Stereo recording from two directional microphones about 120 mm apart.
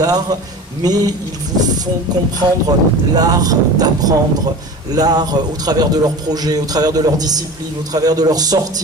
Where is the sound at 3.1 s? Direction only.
30° right (ahead or behind).